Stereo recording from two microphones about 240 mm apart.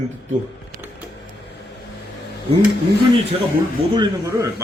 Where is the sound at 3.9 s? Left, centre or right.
Centre.